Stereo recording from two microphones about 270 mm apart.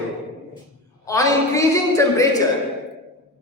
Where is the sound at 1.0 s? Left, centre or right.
Centre.